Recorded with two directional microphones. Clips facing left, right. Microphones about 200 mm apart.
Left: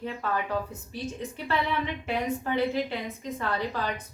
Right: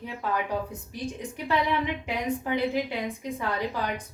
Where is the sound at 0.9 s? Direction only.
15° right (ahead or behind).